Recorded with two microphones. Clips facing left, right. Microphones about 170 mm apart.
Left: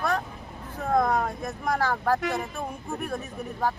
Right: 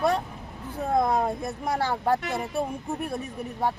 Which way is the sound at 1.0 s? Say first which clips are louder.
Right 2 dB; 25° right (ahead or behind).